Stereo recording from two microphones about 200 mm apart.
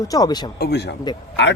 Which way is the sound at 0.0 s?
20° left (ahead or behind).